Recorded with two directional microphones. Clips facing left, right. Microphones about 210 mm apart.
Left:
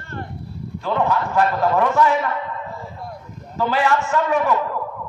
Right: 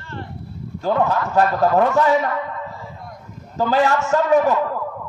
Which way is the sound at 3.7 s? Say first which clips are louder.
Right 3 dB; 40° right (ahead or behind).